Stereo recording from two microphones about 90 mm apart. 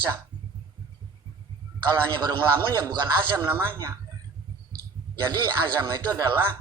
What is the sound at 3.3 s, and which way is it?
Speech, 25° right (ahead or behind).